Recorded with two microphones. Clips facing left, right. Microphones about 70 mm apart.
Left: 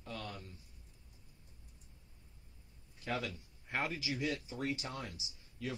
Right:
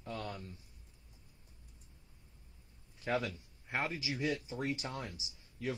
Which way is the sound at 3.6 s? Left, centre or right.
Centre.